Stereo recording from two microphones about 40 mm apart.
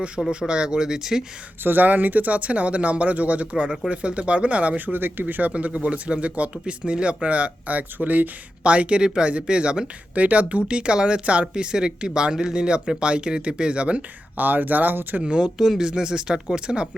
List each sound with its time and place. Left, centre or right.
0.3 s speech: right
1.6 s speech: right
4.9 s speech: right
5.2 s speech: right
8.6 s speech: right
10.2 s speech: right
10.7 s speech: right
14.3 s speech: right
15.2 s speech: right